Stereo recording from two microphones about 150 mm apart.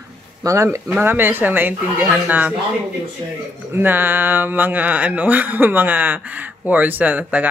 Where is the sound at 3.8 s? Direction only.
15° right (ahead or behind).